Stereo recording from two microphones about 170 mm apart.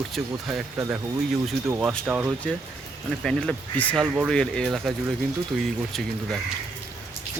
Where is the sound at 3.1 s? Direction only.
5° left (ahead or behind).